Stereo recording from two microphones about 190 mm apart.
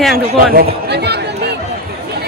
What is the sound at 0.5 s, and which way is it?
Chatter, 60° right (ahead or behind).